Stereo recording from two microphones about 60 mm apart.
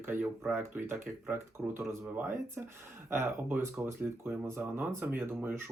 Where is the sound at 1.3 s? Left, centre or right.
Right.